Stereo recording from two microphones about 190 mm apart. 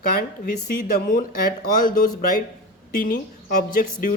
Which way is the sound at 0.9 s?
45° left (ahead or behind).